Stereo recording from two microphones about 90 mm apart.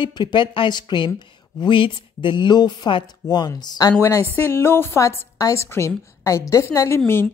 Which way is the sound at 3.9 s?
35° left (ahead or behind).